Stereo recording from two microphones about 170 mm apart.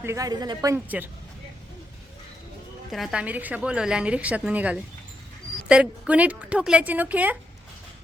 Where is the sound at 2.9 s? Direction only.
5° right (ahead or behind).